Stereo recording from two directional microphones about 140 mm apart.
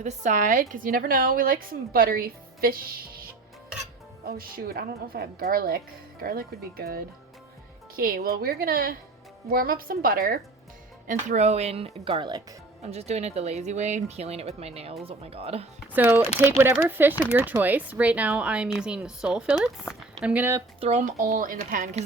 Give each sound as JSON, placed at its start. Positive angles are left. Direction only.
{"t": 0.0, "sound": "a woman's voice", "side_deg": -60}
{"t": 4.4, "sound": "a woman's voice", "side_deg": -90}
{"t": 11.0, "sound": "speech", "side_deg": -65}
{"t": 12.8, "sound": "speech", "side_deg": -50}
{"t": 15.9, "sound": "speech", "side_deg": -15}
{"t": 20.8, "sound": "speech", "side_deg": -55}
{"t": 21.2, "sound": "speech", "side_deg": -70}